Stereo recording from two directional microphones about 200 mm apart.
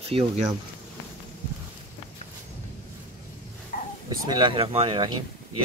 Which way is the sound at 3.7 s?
45° left (ahead or behind).